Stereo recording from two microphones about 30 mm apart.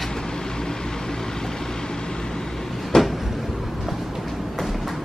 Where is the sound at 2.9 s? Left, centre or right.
Left.